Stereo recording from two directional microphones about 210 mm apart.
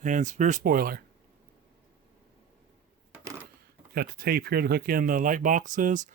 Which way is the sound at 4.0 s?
45° right (ahead or behind).